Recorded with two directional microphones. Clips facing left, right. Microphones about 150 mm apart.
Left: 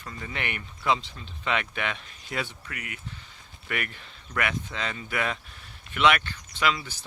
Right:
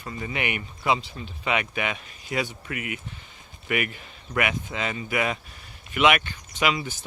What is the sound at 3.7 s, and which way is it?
Speech, 10° right (ahead or behind).